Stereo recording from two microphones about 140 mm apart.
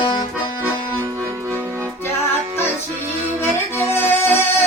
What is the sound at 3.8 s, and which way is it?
Music, 15° left (ahead or behind).